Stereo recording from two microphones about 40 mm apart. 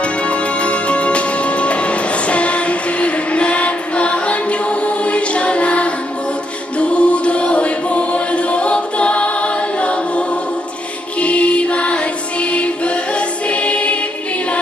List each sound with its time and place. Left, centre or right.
0.0 s music: left
6.8 s chant: left
11.1 s music: left